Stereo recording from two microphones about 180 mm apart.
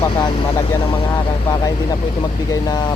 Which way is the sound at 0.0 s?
15° left (ahead or behind).